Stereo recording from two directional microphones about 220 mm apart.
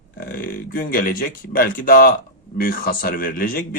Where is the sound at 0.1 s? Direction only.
40° left (ahead or behind).